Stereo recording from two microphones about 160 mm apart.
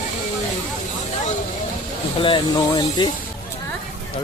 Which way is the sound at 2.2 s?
30° left (ahead or behind).